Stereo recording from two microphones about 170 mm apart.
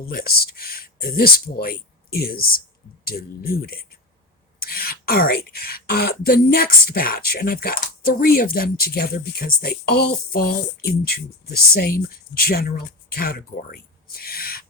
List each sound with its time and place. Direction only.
0.0 s speech: 60° left (ahead or behind)